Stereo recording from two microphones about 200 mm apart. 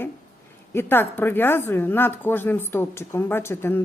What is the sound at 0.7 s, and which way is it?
Speech, 10° left (ahead or behind).